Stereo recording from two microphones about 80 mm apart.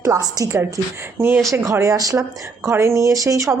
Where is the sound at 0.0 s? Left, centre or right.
Right.